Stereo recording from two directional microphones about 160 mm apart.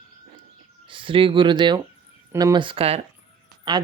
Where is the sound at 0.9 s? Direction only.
30° right (ahead or behind).